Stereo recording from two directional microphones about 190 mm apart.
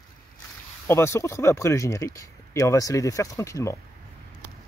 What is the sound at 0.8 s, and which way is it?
Speech, 15° left (ahead or behind).